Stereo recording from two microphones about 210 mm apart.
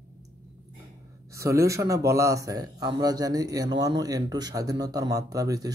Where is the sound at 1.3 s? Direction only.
15° right (ahead or behind).